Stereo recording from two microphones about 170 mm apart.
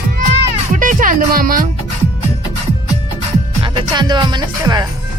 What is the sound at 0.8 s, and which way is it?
Music, 50° right (ahead or behind).